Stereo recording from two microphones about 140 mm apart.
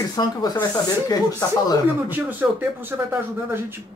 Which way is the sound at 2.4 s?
15° right (ahead or behind).